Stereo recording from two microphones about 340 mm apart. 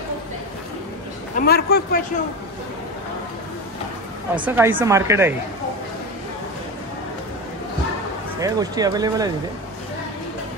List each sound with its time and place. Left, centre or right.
1.4 s a man's voice: left
4.4 s speech: centre
8.4 s speech: centre